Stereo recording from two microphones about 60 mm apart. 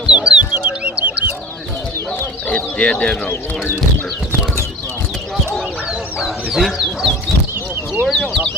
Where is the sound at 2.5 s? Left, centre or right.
Left.